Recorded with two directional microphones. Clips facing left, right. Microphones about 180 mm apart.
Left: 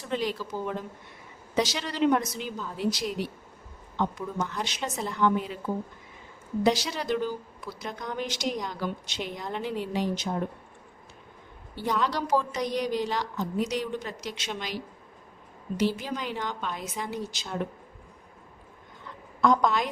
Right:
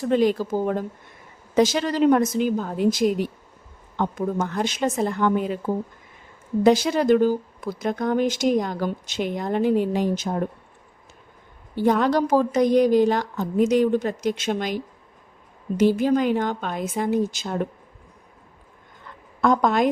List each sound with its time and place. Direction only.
0.0 s speech: 50° right (ahead or behind)
11.7 s speech: 50° right (ahead or behind)
15.8 s speech: 50° right (ahead or behind)
19.4 s speech: 50° right (ahead or behind)